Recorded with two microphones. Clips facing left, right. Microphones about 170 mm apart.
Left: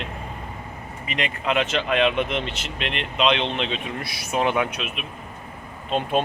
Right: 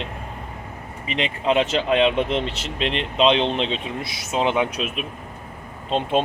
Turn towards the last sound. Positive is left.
turn(degrees=-25)  # may be behind; listen again after turning